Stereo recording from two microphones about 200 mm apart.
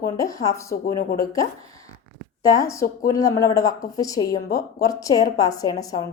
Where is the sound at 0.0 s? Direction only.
15° left (ahead or behind).